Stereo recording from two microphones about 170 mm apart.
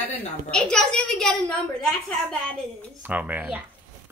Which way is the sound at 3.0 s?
10° right (ahead or behind).